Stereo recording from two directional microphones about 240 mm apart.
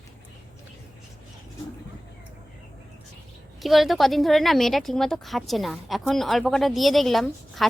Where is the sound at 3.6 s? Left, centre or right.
Centre.